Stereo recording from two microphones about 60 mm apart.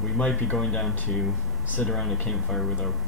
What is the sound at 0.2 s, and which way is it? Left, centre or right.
Speech, left.